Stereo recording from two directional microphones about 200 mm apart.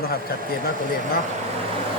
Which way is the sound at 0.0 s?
50° left (ahead or behind).